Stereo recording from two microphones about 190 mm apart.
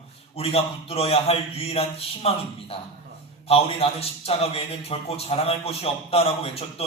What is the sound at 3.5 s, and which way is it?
A man's voice, 30° left (ahead or behind).